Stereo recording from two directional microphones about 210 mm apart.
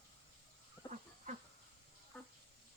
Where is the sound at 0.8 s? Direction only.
20° left (ahead or behind).